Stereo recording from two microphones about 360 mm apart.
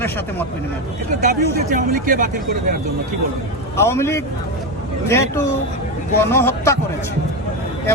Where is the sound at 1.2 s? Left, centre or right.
Right.